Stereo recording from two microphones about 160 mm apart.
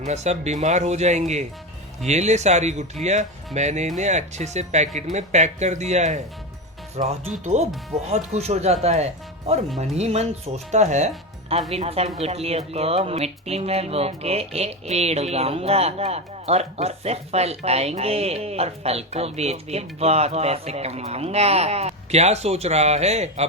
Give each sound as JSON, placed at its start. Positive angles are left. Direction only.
{"t": 0.0, "sound": "speech", "side_deg": -45}